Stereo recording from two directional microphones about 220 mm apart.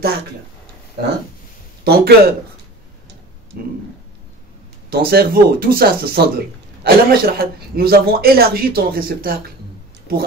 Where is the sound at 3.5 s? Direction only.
45° right (ahead or behind).